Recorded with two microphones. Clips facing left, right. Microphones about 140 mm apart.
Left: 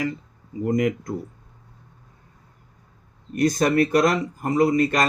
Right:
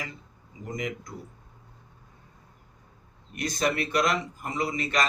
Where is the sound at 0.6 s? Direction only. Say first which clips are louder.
Left 12 dB; 55° left (ahead or behind).